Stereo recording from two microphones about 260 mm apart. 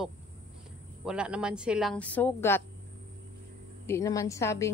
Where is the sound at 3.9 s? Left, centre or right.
Centre.